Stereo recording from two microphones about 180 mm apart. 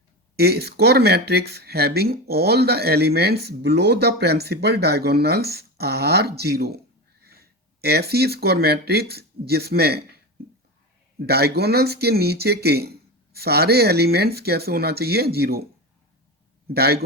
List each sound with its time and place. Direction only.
0.3 s speech: 60° right (ahead or behind)
11.2 s speech: 60° right (ahead or behind)
16.7 s speech: 60° right (ahead or behind)